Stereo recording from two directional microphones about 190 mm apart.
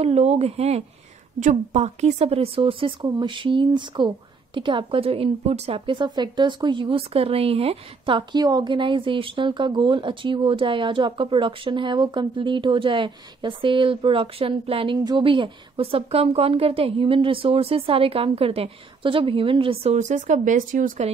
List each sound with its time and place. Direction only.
0.0 s a woman's voice: 35° right (ahead or behind)